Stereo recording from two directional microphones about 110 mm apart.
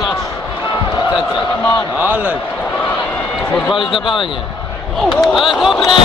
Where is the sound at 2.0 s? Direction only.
15° right (ahead or behind).